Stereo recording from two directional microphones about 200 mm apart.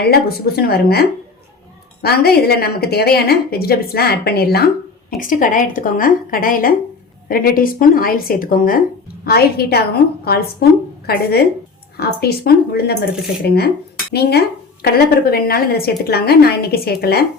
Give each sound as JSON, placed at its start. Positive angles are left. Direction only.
{"t": 0.0, "sound": "a woman's voice", "side_deg": 50}